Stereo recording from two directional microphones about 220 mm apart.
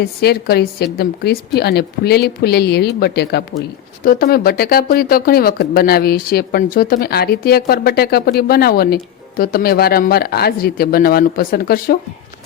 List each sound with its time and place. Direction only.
0.0 s speech: 45° left (ahead or behind)